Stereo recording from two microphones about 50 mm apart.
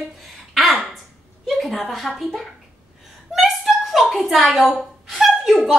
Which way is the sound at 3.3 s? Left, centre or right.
Centre.